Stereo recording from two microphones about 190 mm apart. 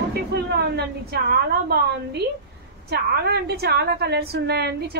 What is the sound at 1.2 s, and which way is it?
Speech, 55° right (ahead or behind).